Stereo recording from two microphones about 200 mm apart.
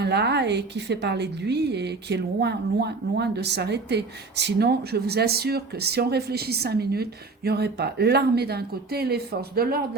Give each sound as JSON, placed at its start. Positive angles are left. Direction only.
{"t": 0.0, "sound": "a woman's voice", "side_deg": -55}